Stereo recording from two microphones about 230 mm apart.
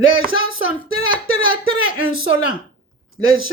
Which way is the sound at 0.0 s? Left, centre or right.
Left.